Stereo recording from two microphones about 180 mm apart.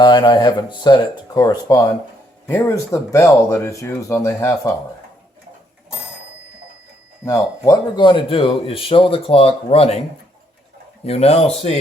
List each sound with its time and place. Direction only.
0.0 s speech: 25° left (ahead or behind)
7.3 s speech: 20° left (ahead or behind)
11.0 s speech: 35° left (ahead or behind)